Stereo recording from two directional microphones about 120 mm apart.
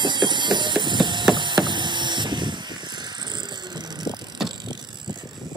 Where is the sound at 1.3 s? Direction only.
40° right (ahead or behind).